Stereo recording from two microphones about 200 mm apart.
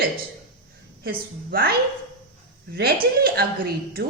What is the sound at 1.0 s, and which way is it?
Speech, 50° right (ahead or behind).